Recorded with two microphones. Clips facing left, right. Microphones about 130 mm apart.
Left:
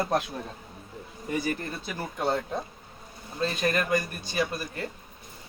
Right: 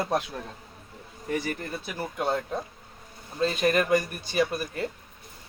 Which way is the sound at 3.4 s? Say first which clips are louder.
Right 3 dB; 10° right (ahead or behind).